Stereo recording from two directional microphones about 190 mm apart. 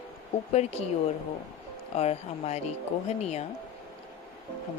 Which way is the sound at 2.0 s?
35° left (ahead or behind).